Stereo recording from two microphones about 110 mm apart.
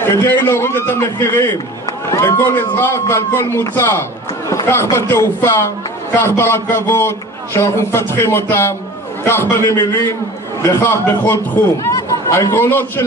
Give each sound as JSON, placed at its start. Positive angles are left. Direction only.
{"t": 0.0, "sound": "a man's voice", "side_deg": 20}
{"t": 10.7, "sound": "a man's voice", "side_deg": 20}